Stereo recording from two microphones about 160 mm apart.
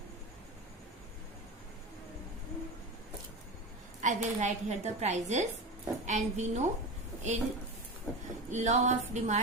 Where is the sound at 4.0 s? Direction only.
50° right (ahead or behind).